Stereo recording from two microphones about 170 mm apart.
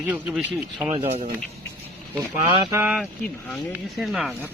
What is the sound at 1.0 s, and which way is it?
Speech, 40° right (ahead or behind).